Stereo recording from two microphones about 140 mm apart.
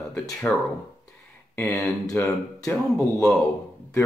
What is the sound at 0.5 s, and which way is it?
Speech, 5° left (ahead or behind).